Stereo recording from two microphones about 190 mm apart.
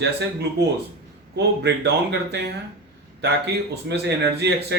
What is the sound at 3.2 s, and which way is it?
Speech, 60° right (ahead or behind).